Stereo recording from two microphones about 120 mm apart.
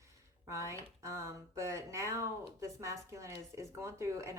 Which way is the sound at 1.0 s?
25° right (ahead or behind).